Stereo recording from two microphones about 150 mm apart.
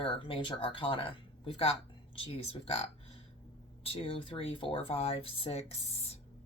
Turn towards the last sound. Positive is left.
turn(degrees=45)  # may be behind; listen again after turning